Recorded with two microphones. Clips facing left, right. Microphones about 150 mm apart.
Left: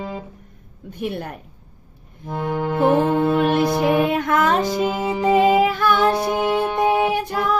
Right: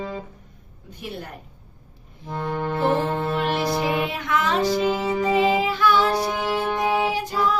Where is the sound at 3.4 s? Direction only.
50° left (ahead or behind).